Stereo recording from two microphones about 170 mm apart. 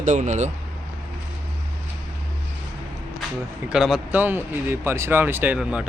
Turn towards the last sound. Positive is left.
turn(degrees=-5)  # may be behind; listen again after turning